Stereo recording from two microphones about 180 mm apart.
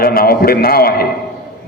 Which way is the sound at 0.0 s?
55° left (ahead or behind).